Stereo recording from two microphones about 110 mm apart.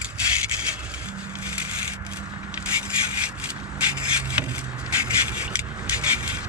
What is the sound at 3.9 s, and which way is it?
Wood, 10° right (ahead or behind).